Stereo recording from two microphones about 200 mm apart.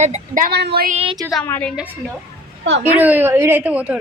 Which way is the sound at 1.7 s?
5° right (ahead or behind).